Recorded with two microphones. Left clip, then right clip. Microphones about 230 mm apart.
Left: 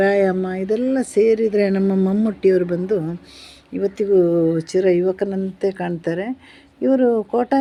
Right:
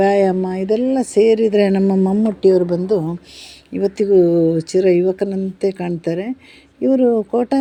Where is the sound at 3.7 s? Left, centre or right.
Right.